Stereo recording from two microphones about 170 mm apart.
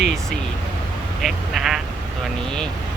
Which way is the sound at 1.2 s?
Centre (ahead or behind).